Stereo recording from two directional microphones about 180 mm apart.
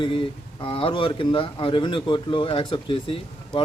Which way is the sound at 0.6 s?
30° left (ahead or behind).